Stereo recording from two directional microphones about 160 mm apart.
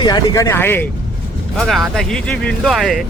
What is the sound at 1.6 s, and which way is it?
Speech, centre (ahead or behind).